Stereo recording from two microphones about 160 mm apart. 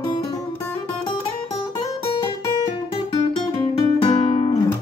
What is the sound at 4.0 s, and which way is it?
Music, 30° left (ahead or behind).